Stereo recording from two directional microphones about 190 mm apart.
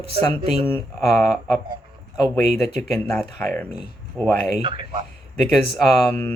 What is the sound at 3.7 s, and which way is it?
Speech, 5° right (ahead or behind).